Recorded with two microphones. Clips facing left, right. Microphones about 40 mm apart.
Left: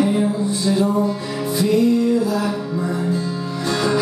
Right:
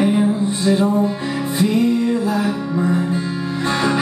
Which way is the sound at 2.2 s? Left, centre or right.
Right.